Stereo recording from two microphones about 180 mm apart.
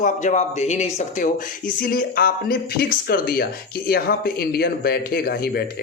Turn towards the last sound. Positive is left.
turn(degrees=60)  # may be behind; listen again after turning